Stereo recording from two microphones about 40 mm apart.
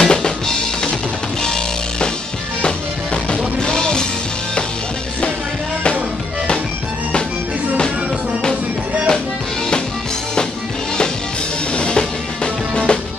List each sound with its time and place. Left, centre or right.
0.0 s drum kit: centre
1.4 s music: centre
3.3 s music: centre
11.7 s music: left